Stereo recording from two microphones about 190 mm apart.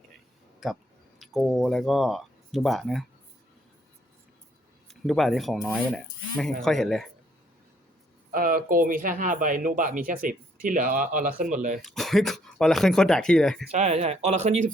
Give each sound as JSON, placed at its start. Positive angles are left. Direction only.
{"t": 0.6, "sound": "speech", "side_deg": 0}
{"t": 4.9, "sound": "speech", "side_deg": 0}
{"t": 8.3, "sound": "speech", "side_deg": -45}
{"t": 11.8, "sound": "speech", "side_deg": 0}
{"t": 13.7, "sound": "speech", "side_deg": -35}